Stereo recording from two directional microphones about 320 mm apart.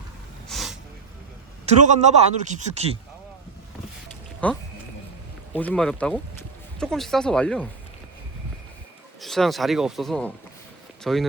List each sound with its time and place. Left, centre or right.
0.4 s snort: centre
1.6 s a man's voice: right
4.4 s speech: centre
9.2 s speech: centre